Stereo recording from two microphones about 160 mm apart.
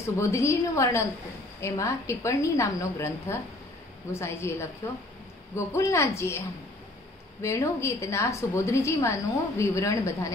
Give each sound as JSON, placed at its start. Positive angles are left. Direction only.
{"t": 0.0, "sound": "a woman's voice", "side_deg": 20}
{"t": 7.4, "sound": "a woman's voice", "side_deg": 20}